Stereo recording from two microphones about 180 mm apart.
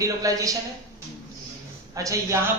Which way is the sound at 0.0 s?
20° right (ahead or behind).